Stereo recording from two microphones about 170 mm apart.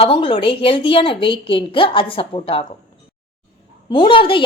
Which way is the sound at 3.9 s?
30° left (ahead or behind).